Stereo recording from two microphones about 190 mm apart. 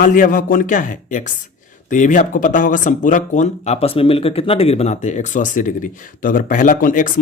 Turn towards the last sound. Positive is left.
turn(degrees=45)  # may be behind; listen again after turning